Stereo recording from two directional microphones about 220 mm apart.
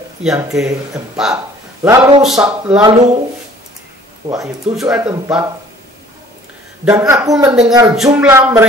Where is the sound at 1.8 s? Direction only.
5° right (ahead or behind).